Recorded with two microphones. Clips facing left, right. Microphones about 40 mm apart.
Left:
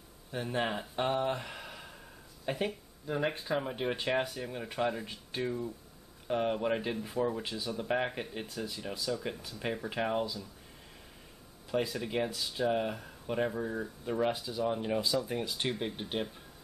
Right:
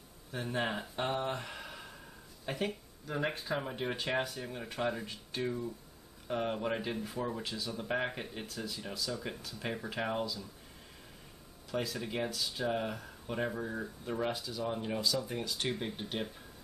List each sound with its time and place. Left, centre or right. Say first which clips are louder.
0.3 s speech: left 2 dB; centre
11.7 s speech: left 4 dB; centre